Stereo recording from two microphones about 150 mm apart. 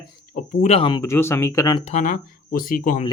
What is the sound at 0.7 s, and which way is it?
Speech, 35° left (ahead or behind).